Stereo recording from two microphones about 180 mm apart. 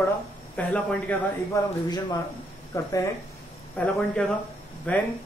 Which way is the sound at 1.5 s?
15° left (ahead or behind).